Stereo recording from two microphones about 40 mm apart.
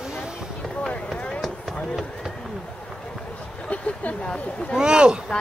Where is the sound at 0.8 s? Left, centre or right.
Left.